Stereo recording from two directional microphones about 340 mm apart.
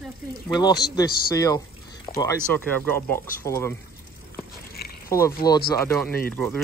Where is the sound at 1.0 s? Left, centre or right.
Centre.